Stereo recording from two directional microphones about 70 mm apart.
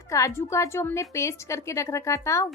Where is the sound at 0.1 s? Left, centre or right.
Left.